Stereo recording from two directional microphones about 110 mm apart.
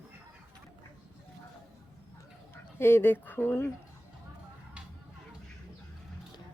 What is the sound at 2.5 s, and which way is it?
Speech, 20° left (ahead or behind).